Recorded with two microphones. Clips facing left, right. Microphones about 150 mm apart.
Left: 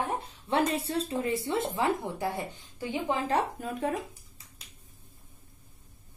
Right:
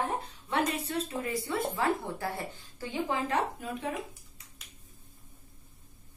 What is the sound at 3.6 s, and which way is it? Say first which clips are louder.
Speech: left 2 dB; 45° left (ahead or behind).